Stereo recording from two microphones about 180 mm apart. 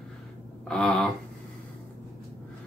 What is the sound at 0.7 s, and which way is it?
Speech, 5° left (ahead or behind).